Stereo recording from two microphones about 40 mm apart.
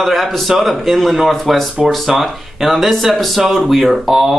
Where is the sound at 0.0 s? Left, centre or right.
Centre.